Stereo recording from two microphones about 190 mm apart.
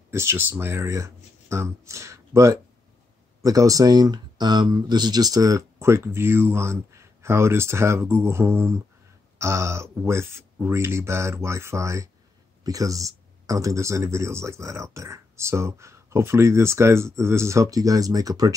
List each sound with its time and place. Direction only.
0.1 s speech: 15° right (ahead or behind)